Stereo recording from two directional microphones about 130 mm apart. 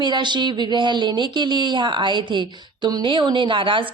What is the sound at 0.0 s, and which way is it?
A woman's voice, 35° right (ahead or behind).